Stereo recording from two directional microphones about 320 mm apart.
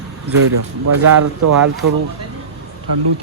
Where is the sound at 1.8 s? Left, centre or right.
Right.